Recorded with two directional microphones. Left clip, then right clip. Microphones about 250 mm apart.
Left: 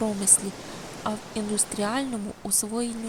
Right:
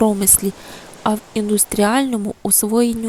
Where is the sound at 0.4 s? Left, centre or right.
Right.